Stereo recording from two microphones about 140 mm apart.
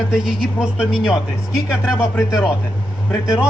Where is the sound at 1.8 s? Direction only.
15° left (ahead or behind).